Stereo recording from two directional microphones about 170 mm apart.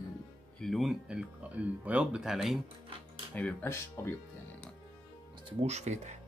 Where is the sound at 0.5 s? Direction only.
Centre (ahead or behind).